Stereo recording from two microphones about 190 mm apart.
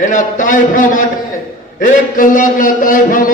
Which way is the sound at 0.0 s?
40° left (ahead or behind).